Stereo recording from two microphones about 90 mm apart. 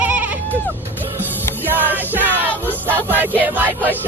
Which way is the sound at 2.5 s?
20° left (ahead or behind).